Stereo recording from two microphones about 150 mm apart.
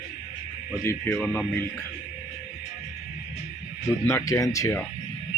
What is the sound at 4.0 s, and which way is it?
Speech, 20° left (ahead or behind).